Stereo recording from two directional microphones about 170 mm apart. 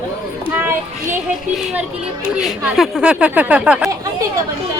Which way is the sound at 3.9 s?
20° right (ahead or behind).